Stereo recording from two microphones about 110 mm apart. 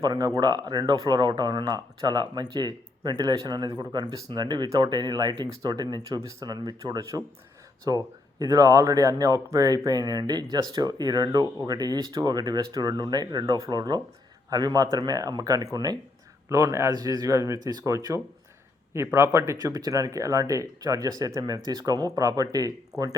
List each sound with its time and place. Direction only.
0.0 s speech: 35° right (ahead or behind)